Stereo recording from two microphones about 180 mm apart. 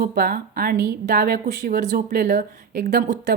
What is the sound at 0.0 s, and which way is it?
Speech, 55° right (ahead or behind).